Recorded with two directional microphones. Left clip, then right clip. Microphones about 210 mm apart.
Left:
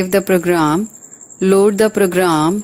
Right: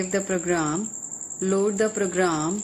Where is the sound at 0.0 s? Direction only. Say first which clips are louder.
Left 11 dB; 45° left (ahead or behind).